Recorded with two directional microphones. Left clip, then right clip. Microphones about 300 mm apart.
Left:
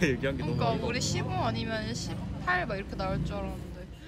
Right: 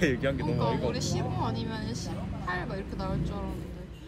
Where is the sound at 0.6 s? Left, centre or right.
Centre.